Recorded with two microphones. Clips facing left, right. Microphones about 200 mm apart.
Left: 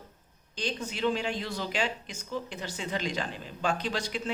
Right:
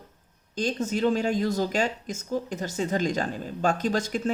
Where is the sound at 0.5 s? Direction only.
45° right (ahead or behind).